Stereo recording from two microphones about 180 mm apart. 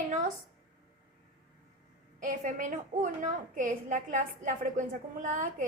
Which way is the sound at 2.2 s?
45° right (ahead or behind).